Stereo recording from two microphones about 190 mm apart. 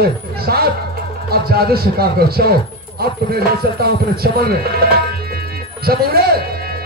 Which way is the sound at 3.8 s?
55° right (ahead or behind).